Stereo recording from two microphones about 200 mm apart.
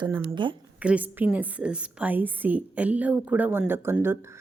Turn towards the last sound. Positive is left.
turn(degrees=-10)  # may be behind; listen again after turning